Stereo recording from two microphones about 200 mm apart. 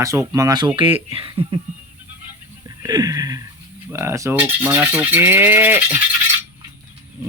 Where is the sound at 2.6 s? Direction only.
20° right (ahead or behind).